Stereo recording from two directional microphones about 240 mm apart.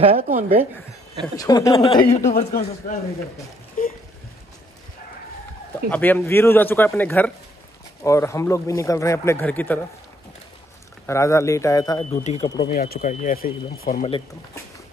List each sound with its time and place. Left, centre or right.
0.2 s speech: right
1.3 s speech: centre
2.2 s a man's voice: left
3.8 s a sound: left
5.9 s speech: centre
11.1 s a man's voice: centre; by 14.1 s left